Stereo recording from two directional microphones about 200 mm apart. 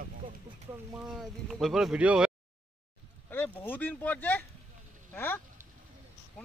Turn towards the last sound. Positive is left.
turn(degrees=10)  # may be behind; listen again after turning